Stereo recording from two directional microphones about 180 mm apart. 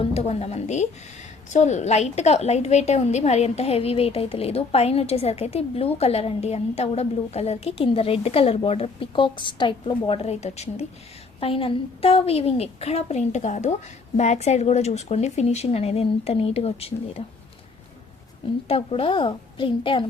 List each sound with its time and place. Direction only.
0.0 s a woman's voice: 35° left (ahead or behind)
18.7 s a woman's voice: 30° left (ahead or behind)